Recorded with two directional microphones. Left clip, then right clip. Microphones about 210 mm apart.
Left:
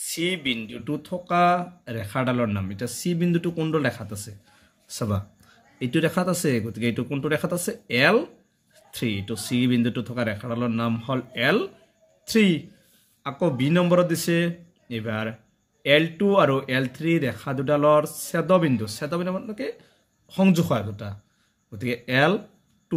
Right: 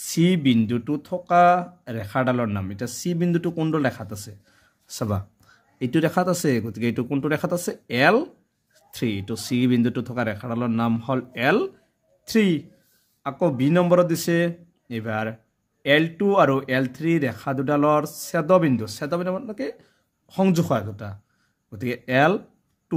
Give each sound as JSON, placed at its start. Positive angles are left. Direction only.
{"t": 0.0, "sound": "speech", "side_deg": -50}